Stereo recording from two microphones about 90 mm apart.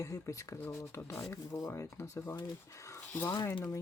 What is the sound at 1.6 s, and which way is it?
Speech, 45° left (ahead or behind).